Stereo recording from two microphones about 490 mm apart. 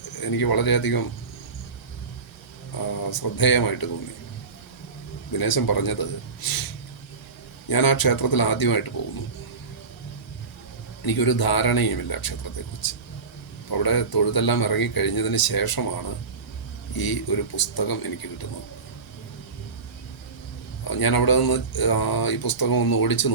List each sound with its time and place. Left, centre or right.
0.2 s speech: left
3.0 s speech: left
5.3 s speech: left
7.7 s speech: left
11.0 s speech: left
13.7 s speech: left
16.9 s speech: left
20.9 s speech: left